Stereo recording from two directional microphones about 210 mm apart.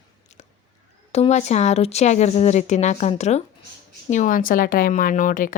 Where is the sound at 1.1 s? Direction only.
30° left (ahead or behind).